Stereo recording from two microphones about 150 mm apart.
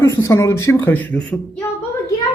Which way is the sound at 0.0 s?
20° left (ahead or behind).